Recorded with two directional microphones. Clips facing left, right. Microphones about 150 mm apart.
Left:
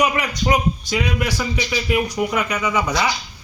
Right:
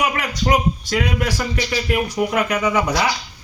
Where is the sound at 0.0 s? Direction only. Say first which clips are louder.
Left 1 dB; centre (ahead or behind).